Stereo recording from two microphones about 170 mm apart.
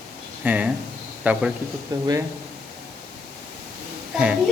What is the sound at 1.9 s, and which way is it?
Speech, 25° right (ahead or behind).